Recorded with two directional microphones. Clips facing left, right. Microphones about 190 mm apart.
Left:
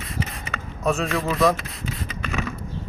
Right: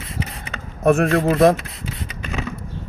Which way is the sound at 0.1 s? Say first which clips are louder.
Even; 30° right (ahead or behind).